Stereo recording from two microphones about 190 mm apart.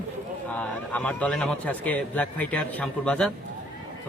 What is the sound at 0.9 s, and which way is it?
A man's voice, 5° left (ahead or behind).